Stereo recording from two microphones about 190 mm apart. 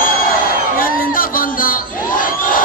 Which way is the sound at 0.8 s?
50° left (ahead or behind).